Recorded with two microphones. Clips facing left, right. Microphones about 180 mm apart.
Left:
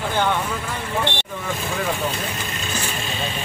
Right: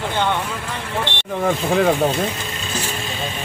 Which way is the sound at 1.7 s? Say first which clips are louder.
Right 8 dB; 55° right (ahead or behind).